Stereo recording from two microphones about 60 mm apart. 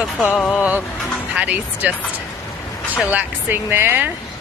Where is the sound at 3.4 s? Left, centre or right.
Right.